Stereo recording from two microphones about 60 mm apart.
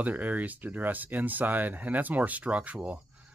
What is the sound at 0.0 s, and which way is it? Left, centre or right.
Speech, right.